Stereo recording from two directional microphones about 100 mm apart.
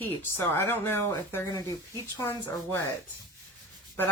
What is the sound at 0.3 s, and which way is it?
Speech, 25° left (ahead or behind).